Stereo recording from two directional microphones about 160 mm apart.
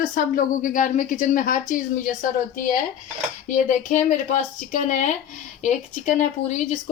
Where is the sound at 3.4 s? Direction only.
55° left (ahead or behind).